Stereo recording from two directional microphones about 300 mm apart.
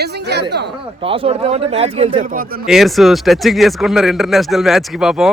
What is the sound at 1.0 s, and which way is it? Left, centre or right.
Speech, centre.